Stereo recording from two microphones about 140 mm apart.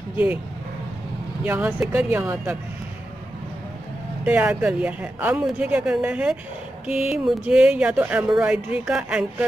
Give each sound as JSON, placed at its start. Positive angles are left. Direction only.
{"t": 1.4, "sound": "a woman's voice", "side_deg": -10}
{"t": 4.2, "sound": "a woman's voice", "side_deg": -10}